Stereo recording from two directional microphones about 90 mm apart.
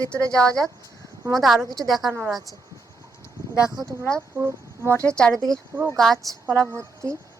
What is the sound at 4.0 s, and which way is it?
A woman's voice, 5° left (ahead or behind).